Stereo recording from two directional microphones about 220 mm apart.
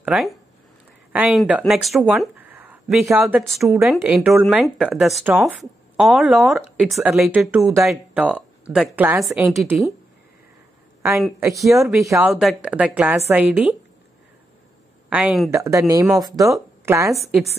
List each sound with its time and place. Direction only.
0.0 s speech: 5° right (ahead or behind)
11.0 s a woman's voice: 10° right (ahead or behind)
11.6 s speech: centre (ahead or behind)
12.0 s a woman's voice: 15° right (ahead or behind)
12.3 s a woman's voice: centre (ahead or behind)
15.0 s a woman's voice: 5° right (ahead or behind)
17.2 s speech: centre (ahead or behind)